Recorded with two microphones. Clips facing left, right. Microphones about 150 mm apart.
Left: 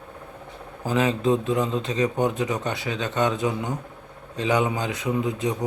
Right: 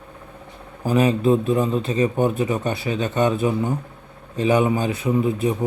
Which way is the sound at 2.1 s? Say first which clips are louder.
Right 3 dB; 15° left (ahead or behind).